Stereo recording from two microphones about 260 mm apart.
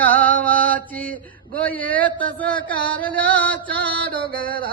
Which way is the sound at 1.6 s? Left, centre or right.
Centre.